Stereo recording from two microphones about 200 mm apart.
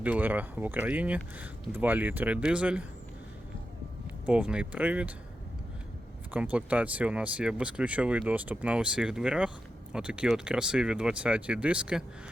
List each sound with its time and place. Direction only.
0.0 s speech: 10° right (ahead or behind)
4.3 s speech: 5° right (ahead or behind)
6.3 s speech: 5° right (ahead or behind)